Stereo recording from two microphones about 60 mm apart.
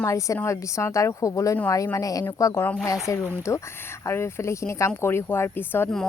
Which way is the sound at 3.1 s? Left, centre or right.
Left.